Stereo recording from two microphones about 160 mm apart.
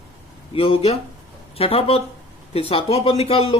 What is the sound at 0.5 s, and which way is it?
Speech, 35° left (ahead or behind).